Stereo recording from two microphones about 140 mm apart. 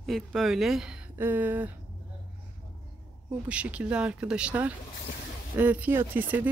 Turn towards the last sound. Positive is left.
turn(degrees=-15)  # may be behind; listen again after turning